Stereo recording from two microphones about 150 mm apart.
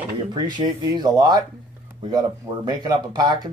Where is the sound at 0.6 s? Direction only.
30° right (ahead or behind).